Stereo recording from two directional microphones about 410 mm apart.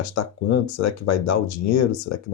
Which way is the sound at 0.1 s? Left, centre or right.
Left.